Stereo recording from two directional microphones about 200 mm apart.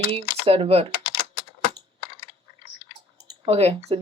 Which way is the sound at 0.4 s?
30° right (ahead or behind).